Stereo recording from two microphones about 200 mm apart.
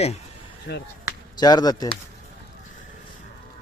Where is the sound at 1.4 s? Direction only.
20° left (ahead or behind).